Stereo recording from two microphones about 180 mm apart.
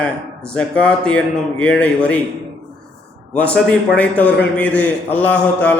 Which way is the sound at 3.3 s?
5° left (ahead or behind).